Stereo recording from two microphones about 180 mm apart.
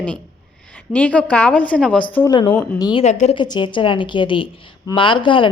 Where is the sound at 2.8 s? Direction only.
25° left (ahead or behind).